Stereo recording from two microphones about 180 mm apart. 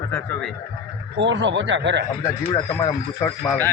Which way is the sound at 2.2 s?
15° left (ahead or behind).